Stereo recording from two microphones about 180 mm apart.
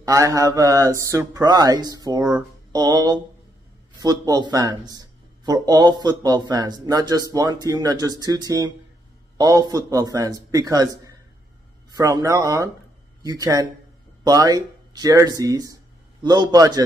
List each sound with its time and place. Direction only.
0.0 s a man's voice: 20° right (ahead or behind)